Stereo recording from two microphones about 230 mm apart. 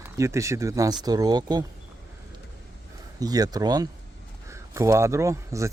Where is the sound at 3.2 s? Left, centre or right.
Centre.